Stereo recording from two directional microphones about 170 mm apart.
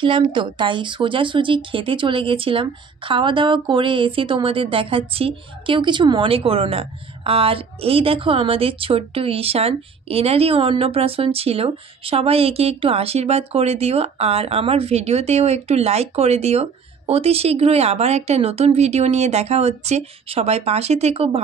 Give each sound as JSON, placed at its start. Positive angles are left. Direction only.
{"t": 0.0, "sound": "speech", "side_deg": -30}